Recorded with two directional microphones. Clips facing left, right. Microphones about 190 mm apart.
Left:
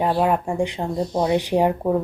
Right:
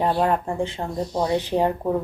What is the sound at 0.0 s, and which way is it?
Speech, 5° left (ahead or behind).